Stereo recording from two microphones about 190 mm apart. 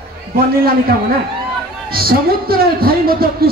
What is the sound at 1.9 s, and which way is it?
Speech, 50° right (ahead or behind).